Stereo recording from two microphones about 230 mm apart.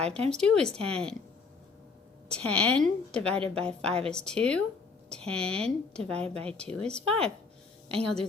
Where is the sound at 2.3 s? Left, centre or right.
Centre.